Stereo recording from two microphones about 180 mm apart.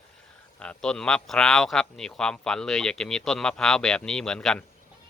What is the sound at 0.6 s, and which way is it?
Speech, 5° left (ahead or behind).